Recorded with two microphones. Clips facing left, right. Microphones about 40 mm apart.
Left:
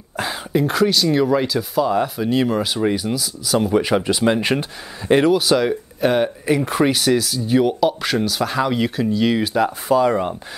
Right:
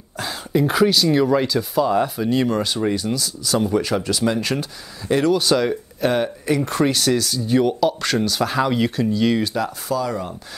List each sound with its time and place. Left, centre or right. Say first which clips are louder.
0.2 s a sound: left 3 dB; centre
0.6 s speech: right 1 dB; centre
3.7 s speech: left 3 dB; left
5.4 s speech: left 1 dB; centre
9.6 s speech: left 6 dB; left